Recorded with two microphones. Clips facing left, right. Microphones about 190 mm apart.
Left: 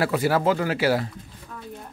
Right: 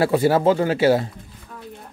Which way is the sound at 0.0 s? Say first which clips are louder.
Right 5 dB; 25° right (ahead or behind).